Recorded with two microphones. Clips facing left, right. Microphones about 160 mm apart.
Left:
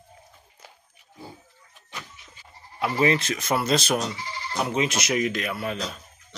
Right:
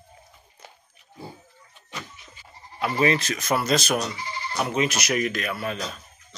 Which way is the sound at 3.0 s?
25° left (ahead or behind).